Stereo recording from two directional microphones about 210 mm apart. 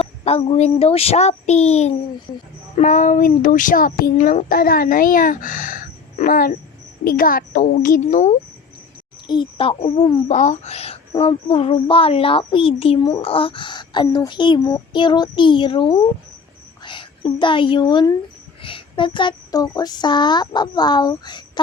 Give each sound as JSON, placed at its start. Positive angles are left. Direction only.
{"t": 0.3, "sound": "speech", "side_deg": 30}
{"t": 9.2, "sound": "a woman's voice", "side_deg": 20}